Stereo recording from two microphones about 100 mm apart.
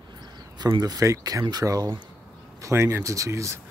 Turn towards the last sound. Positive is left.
turn(degrees=-30)  # may be behind; listen again after turning